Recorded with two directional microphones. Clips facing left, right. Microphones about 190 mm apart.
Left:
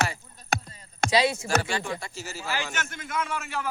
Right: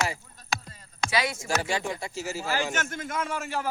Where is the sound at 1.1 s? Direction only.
30° left (ahead or behind).